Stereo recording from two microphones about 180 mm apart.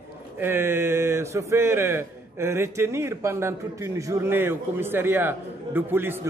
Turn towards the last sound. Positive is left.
turn(degrees=-10)  # may be behind; listen again after turning